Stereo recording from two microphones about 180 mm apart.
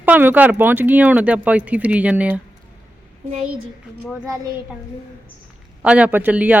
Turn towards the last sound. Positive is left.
turn(degrees=-10)  # may be behind; listen again after turning